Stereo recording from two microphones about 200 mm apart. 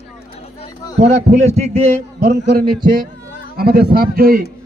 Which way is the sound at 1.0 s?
35° right (ahead or behind).